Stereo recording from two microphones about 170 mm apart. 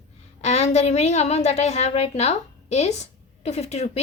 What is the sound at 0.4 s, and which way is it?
A woman's voice, 40° left (ahead or behind).